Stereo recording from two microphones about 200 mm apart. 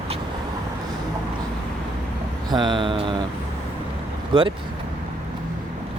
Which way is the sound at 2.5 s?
20° right (ahead or behind).